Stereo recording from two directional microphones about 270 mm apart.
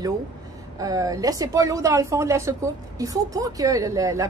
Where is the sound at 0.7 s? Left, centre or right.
Centre.